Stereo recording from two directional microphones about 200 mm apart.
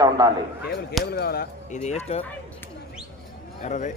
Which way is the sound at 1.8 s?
35° left (ahead or behind).